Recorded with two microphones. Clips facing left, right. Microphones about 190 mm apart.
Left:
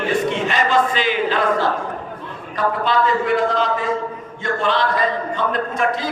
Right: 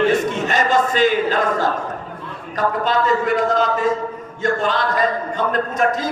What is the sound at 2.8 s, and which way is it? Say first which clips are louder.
A man's voice: even; 45° right (ahead or behind).